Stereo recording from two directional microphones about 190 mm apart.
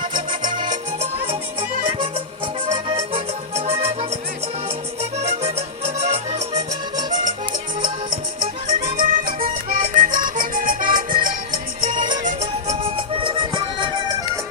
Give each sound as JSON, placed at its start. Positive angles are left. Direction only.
{"t": 2.6, "sound": "music", "side_deg": -30}
{"t": 5.2, "sound": "music", "side_deg": -35}
{"t": 9.0, "sound": "music", "side_deg": -45}
{"t": 11.9, "sound": "music", "side_deg": -25}
{"t": 12.2, "sound": "music", "side_deg": -35}